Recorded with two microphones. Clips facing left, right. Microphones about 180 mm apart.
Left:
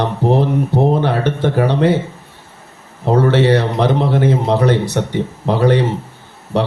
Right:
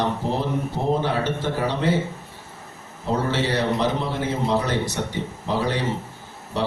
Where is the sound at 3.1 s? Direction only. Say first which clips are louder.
Left 11 dB; 65° left (ahead or behind).